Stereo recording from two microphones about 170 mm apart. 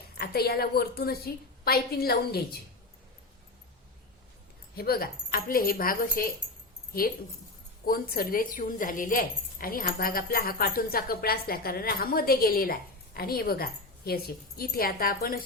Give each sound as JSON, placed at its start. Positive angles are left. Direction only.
{"t": 0.2, "sound": "a woman's voice", "side_deg": 65}
{"t": 4.7, "sound": "a woman's voice", "side_deg": 60}
{"t": 7.9, "sound": "a woman's voice", "side_deg": 55}